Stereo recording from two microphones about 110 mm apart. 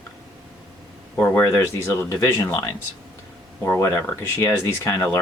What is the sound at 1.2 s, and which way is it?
Speech, 20° left (ahead or behind).